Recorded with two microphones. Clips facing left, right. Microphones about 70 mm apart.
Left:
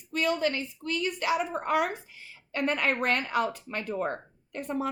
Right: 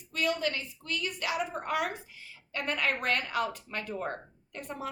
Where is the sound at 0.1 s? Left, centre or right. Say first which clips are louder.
Left 3 dB; left.